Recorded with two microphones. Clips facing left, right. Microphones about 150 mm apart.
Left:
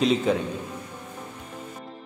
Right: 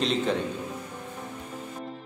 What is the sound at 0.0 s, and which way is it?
Speech, 5° left (ahead or behind).